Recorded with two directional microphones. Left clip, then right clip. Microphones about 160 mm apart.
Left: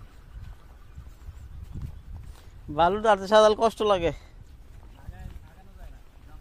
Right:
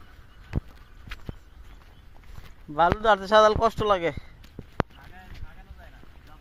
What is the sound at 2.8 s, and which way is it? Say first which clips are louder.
A man's voice: right 1 dB; 30° left (ahead or behind).